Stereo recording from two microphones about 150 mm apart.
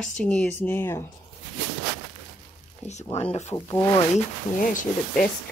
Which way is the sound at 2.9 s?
45° left (ahead or behind).